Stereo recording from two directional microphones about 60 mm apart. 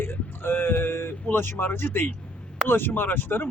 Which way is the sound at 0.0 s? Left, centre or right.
Left.